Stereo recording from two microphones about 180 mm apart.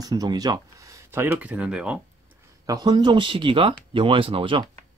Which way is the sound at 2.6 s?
20° right (ahead or behind).